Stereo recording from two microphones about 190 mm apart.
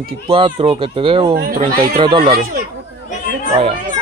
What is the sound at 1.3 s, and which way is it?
Speech, 50° right (ahead or behind).